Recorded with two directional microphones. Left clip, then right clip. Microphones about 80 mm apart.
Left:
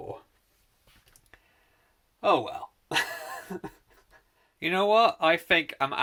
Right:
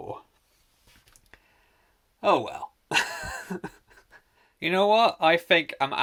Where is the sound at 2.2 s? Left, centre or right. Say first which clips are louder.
Right 1 dB; right.